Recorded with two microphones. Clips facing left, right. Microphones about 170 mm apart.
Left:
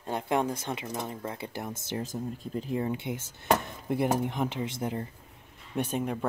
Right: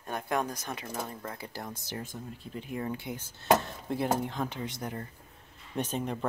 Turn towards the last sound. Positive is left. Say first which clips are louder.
# left 2 dB
turn(degrees=10)  # may be behind; listen again after turning